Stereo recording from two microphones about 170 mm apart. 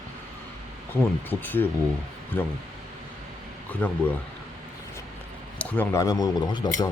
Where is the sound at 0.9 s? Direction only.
10° left (ahead or behind).